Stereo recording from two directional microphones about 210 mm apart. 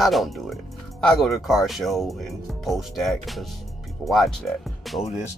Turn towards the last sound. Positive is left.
turn(degrees=0)  # may be behind; listen again after turning